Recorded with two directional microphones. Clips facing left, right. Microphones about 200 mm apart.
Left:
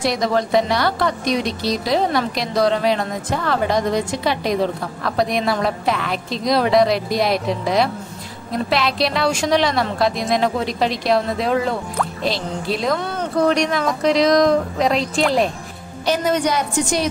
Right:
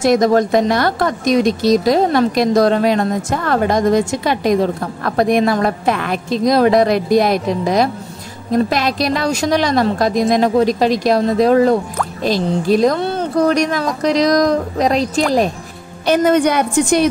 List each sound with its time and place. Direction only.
0.0 s a woman's voice: 45° right (ahead or behind)
16.1 s a woman's voice: 55° right (ahead or behind)